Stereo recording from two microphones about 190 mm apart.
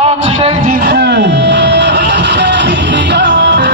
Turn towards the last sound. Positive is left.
turn(degrees=-65)  # may be behind; listen again after turning